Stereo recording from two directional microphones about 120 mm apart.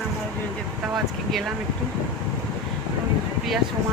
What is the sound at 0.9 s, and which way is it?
Speech, centre (ahead or behind).